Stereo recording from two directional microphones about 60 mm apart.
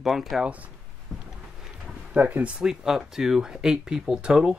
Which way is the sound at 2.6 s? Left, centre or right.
Centre.